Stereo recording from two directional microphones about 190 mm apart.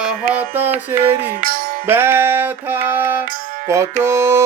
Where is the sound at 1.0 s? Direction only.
50° right (ahead or behind).